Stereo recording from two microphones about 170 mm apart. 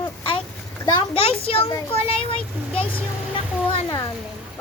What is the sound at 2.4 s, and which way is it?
Speech, 5° left (ahead or behind).